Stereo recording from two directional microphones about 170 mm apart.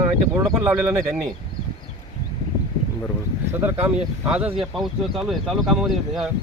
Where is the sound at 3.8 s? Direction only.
5° right (ahead or behind).